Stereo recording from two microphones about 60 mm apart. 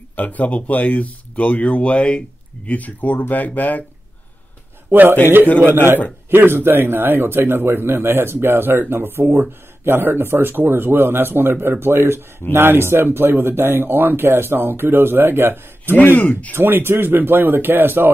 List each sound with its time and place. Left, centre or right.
0.1 s speech: left
4.9 s speech: right
16.0 s speech: left
16.5 s speech: right